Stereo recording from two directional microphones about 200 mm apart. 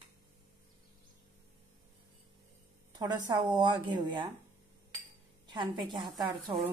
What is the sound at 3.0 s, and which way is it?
A woman's voice, 20° right (ahead or behind).